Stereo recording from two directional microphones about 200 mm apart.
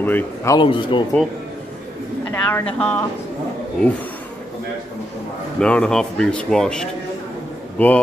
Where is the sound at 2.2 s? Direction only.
10° left (ahead or behind).